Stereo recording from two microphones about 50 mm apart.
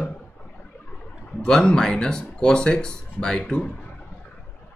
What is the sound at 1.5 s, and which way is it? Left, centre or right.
Speech, centre.